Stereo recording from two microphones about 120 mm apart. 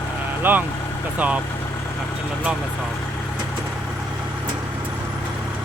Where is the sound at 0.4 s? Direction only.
15° right (ahead or behind).